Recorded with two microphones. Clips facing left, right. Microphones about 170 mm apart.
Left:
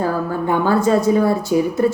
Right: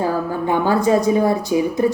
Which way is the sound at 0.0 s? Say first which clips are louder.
Even; 20° right (ahead or behind).